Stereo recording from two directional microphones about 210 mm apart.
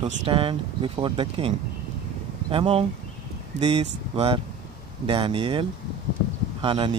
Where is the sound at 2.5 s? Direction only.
25° right (ahead or behind).